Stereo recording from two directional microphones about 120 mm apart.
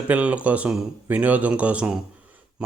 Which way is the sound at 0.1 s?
10° right (ahead or behind).